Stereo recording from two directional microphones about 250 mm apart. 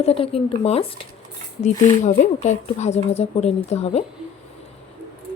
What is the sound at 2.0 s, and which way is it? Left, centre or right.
Speech, left.